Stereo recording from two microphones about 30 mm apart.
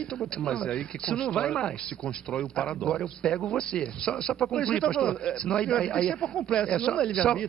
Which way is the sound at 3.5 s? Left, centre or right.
Left.